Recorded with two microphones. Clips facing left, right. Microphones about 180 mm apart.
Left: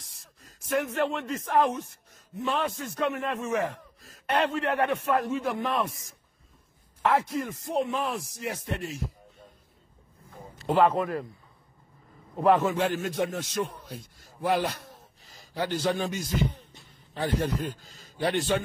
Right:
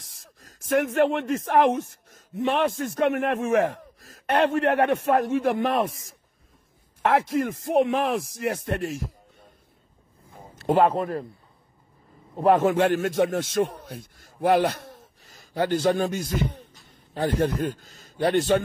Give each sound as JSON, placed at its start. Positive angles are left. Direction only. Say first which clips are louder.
{"t": 0.7, "sound": "speech", "louder": "right 6 dB", "side_deg": -65}
{"t": 7.0, "sound": "a man's voice", "louder": "right 4 dB", "side_deg": -65}
{"t": 10.7, "sound": "a man's voice", "louder": "right 2 dB", "side_deg": -40}
{"t": 12.4, "sound": "a man's voice", "louder": "right 4 dB", "side_deg": -50}